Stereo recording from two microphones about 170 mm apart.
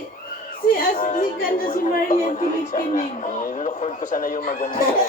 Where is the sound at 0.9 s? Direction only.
50° left (ahead or behind).